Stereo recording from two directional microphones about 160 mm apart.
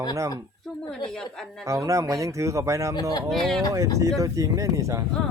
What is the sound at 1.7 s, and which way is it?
Speech, 20° right (ahead or behind).